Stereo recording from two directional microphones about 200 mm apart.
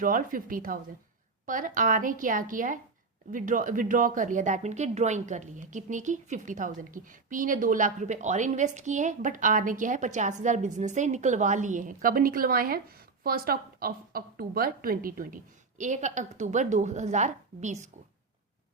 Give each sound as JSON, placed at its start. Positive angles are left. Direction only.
{"t": 0.0, "sound": "a woman's voice", "side_deg": -45}